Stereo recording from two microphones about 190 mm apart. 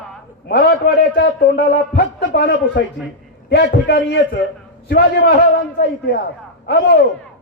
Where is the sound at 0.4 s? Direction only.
60° left (ahead or behind).